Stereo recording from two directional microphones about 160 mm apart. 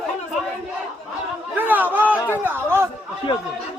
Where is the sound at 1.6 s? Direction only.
10° right (ahead or behind).